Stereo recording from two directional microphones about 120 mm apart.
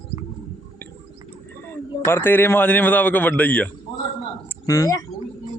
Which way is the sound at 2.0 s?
20° left (ahead or behind).